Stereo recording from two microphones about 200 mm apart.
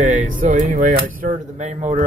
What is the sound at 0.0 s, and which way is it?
Speech, 40° right (ahead or behind).